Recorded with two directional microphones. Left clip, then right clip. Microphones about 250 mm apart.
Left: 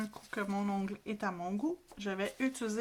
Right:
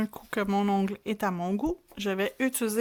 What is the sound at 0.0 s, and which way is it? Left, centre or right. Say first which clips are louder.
Speech: right 8 dB; right.